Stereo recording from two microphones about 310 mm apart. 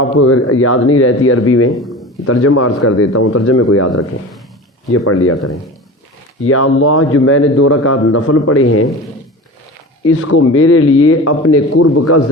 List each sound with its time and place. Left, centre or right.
0.2 s a man's voice: left
1.7 s a sound: centre
2.2 s a man's voice: left
5.0 s a man's voice: left
10.1 s a man's voice: left